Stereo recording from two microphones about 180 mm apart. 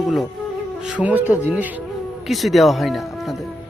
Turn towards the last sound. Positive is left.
turn(degrees=0)  # may be behind; listen again after turning